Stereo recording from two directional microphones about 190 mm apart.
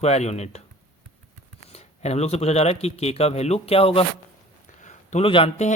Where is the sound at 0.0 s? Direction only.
35° left (ahead or behind).